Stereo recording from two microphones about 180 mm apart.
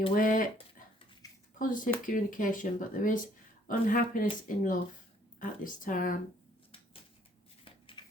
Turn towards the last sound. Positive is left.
turn(degrees=30)  # may be behind; listen again after turning